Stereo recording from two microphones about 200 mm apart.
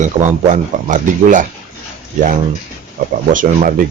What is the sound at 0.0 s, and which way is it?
Speech, 40° right (ahead or behind).